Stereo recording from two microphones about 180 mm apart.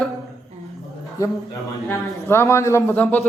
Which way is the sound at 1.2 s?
20° left (ahead or behind).